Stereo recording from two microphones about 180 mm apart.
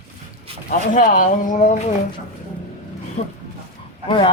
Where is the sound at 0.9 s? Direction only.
50° left (ahead or behind).